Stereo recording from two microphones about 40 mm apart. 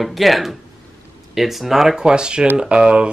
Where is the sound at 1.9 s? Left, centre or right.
Right.